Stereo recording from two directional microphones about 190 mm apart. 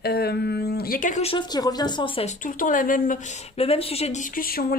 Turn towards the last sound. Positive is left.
turn(degrees=50)  # may be behind; listen again after turning